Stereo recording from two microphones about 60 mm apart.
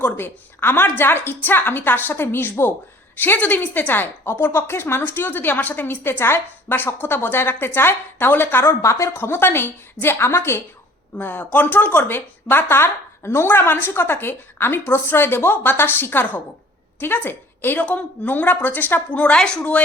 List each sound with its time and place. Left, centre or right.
0.0 s a woman's voice: left
8.8 s speech: left
9.1 s a woman's voice: left
11.2 s a woman's voice: left; by 19.5 s centre